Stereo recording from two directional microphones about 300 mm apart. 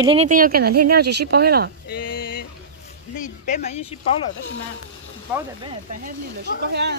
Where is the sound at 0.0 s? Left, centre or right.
Centre.